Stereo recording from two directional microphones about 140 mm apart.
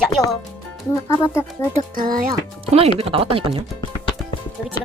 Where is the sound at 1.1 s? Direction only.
20° left (ahead or behind).